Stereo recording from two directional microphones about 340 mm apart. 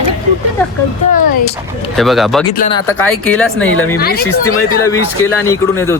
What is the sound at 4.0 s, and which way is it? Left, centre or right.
Speech, left.